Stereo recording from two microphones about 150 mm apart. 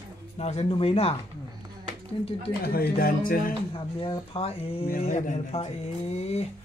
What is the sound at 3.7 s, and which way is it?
Speech, 35° left (ahead or behind).